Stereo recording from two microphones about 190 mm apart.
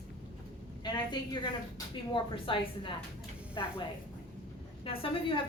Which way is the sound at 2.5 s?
25° left (ahead or behind).